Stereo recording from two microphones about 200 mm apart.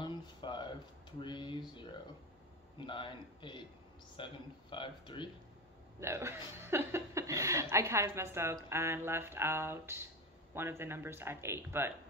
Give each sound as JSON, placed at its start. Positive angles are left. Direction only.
{"t": 0.0, "sound": "a sound", "side_deg": 25}
{"t": 2.8, "sound": "speech", "side_deg": 25}
{"t": 5.9, "sound": "speech", "side_deg": -15}